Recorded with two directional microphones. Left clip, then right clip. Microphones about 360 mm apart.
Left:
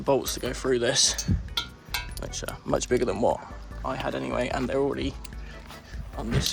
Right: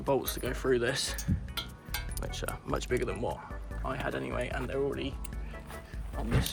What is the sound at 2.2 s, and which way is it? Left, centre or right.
Speech, centre.